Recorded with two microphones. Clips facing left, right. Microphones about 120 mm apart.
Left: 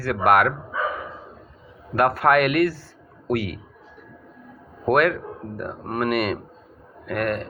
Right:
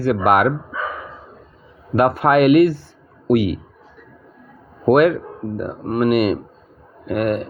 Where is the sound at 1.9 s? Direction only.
20° right (ahead or behind).